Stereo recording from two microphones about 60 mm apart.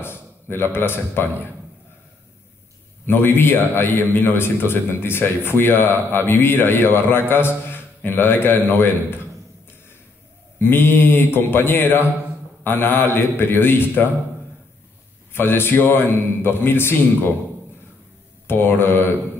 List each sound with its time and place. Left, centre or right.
0.0 s a sound: left
0.7 s a man's voice: left
3.1 s a man's voice: left
10.6 s a man's voice: left
15.3 s a man's voice: left
18.5 s a man's voice: left